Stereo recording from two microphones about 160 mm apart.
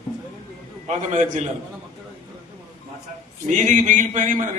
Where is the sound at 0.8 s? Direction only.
50° right (ahead or behind).